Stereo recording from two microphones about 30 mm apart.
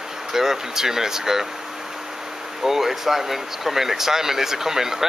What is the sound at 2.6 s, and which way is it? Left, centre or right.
Speech, centre.